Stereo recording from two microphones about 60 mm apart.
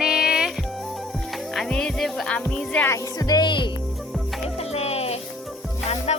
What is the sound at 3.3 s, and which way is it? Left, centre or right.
Speech, left.